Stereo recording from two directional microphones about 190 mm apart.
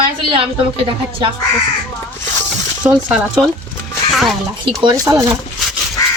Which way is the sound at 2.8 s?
5° right (ahead or behind).